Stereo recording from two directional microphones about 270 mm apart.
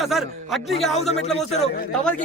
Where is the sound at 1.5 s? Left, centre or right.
Left.